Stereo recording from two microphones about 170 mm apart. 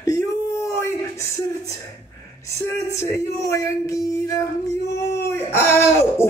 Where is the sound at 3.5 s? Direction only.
15° left (ahead or behind).